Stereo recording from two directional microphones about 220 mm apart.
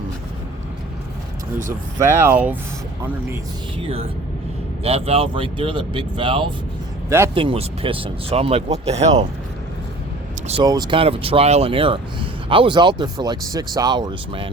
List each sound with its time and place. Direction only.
2.0 s speech: 10° right (ahead or behind)
3.8 s speech: 25° right (ahead or behind)
10.4 s speech: 25° right (ahead or behind)